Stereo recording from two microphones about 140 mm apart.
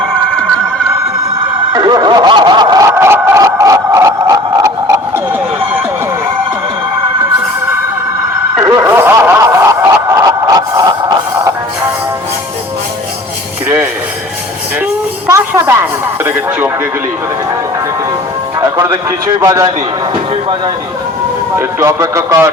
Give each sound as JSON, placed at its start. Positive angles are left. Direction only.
{"t": 1.7, "sound": "snicker", "side_deg": -30}
{"t": 8.6, "sound": "snicker", "side_deg": -20}
{"t": 15.3, "sound": "speech", "side_deg": -20}
{"t": 18.6, "sound": "music", "side_deg": -25}
{"t": 19.4, "sound": "speech", "side_deg": -25}
{"t": 21.5, "sound": "speech", "side_deg": -20}